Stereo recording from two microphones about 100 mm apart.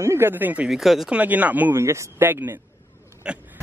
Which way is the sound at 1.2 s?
15° right (ahead or behind).